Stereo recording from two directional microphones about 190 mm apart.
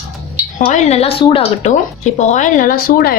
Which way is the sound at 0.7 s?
35° left (ahead or behind).